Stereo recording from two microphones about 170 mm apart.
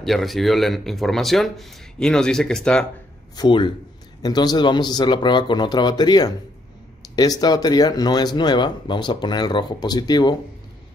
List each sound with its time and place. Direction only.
0.0 s speech: centre (ahead or behind)
3.3 s speech: 30° left (ahead or behind)